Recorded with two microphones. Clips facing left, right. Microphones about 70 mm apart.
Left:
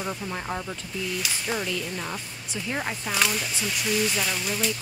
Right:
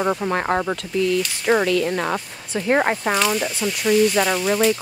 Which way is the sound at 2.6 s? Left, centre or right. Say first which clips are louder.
Right 12 dB; right.